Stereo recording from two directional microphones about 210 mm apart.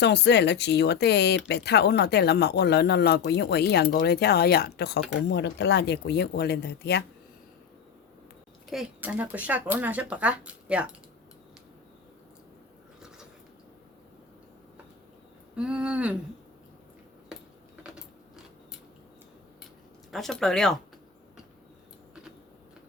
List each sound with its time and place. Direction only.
0.0 s speech: 55° left (ahead or behind)
8.7 s speech: 5° right (ahead or behind)
15.5 s speech: 5° right (ahead or behind)
17.8 s a sound: 5° right (ahead or behind)
20.1 s speech: centre (ahead or behind)